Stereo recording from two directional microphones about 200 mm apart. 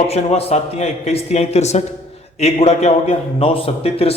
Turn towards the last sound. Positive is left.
turn(degrees=30)  # may be behind; listen again after turning